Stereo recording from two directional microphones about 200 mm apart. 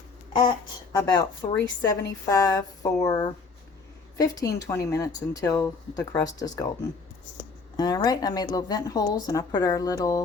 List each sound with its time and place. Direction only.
0.9 s a woman's voice: 20° left (ahead or behind)
7.8 s a woman's voice: 20° left (ahead or behind)